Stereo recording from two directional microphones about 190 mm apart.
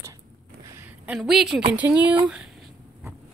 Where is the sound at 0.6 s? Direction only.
10° right (ahead or behind).